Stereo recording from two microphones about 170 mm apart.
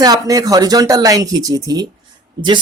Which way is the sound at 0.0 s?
20° right (ahead or behind).